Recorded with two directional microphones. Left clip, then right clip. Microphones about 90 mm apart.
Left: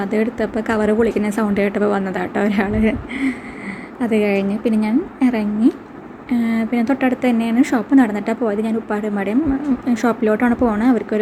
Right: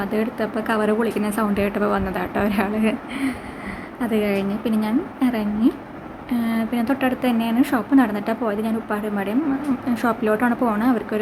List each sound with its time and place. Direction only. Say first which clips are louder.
0.0 s a woman's voice: left 4 dB; 35° left (ahead or behind)